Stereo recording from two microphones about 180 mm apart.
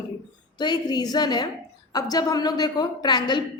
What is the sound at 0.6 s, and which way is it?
A woman's voice, 20° left (ahead or behind).